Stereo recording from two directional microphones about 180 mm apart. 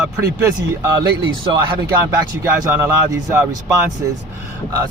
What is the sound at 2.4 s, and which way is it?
Speech, 15° right (ahead or behind).